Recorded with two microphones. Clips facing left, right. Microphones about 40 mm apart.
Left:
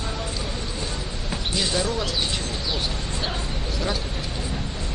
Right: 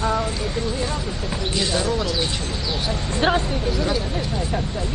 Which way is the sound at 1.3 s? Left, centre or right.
Centre.